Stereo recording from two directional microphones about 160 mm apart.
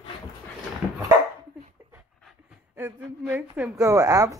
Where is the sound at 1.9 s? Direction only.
5° right (ahead or behind).